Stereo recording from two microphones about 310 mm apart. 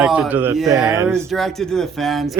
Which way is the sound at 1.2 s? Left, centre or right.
Centre.